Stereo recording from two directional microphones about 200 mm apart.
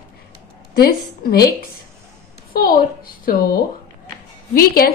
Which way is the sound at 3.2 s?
50° left (ahead or behind).